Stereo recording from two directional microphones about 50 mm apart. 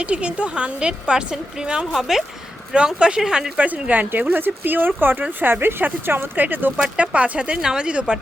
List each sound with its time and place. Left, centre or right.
0.0 s a woman's voice: right; by 2.2 s centre
2.7 s speech: centre
3.6 s speech: right
6.9 s a woman's voice: right